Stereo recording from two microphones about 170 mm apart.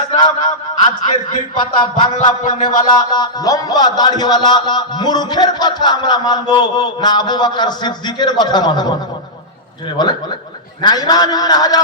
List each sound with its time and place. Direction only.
0.2 s speech: 25° left (ahead or behind)
1.5 s speech: 25° left (ahead or behind)
2.4 s a sound: 50° left (ahead or behind)
2.8 s speech: 25° left (ahead or behind)
10.0 s speech: 25° left (ahead or behind)